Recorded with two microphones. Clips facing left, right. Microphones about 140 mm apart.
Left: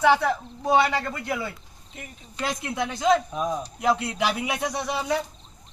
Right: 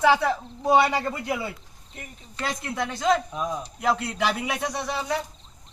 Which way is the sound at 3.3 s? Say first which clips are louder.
Left 2 dB; 20° left (ahead or behind).